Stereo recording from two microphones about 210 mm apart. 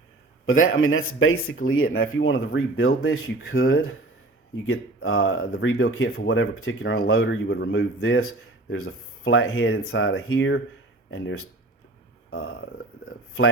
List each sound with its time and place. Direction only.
0.4 s speech: 75° left (ahead or behind)